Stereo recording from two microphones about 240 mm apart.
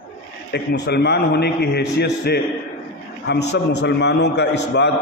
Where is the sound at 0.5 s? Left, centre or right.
Left.